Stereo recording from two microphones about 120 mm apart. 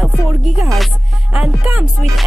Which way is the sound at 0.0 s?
5° right (ahead or behind).